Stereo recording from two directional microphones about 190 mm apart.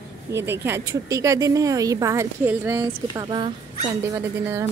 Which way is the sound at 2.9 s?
20° right (ahead or behind).